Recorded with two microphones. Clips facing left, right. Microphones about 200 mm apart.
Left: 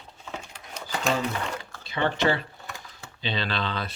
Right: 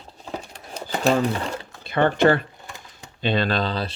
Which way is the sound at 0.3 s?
35° right (ahead or behind).